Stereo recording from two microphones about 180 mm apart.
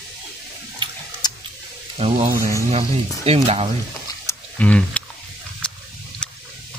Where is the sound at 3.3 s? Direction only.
30° right (ahead or behind).